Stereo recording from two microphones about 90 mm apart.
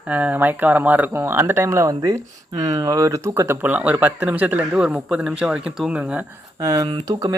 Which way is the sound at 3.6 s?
20° right (ahead or behind).